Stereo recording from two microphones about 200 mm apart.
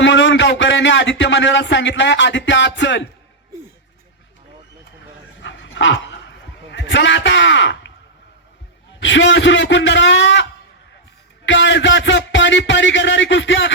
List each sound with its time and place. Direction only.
0.0 s speech: 65° left (ahead or behind)
5.4 s dog: 65° left (ahead or behind)
9.0 s a man's voice: 65° left (ahead or behind)
11.4 s a man's voice: 65° left (ahead or behind)